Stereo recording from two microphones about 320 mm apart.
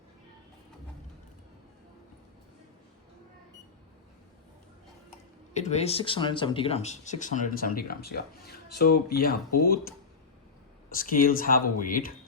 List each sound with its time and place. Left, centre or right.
5.5 s speech: left